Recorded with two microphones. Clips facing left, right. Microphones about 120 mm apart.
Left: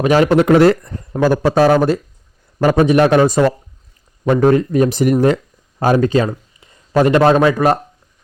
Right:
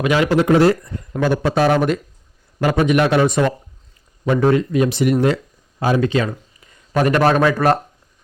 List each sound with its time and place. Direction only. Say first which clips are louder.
0.0 s a man's voice: left 5 dB; 40° left (ahead or behind)
0.3 s a man's voice: left 3 dB; 65° left (ahead or behind)
1.2 s a man's voice: left 4 dB; 40° left (ahead or behind)
6.9 s a man's voice: left 4 dB; 25° left (ahead or behind)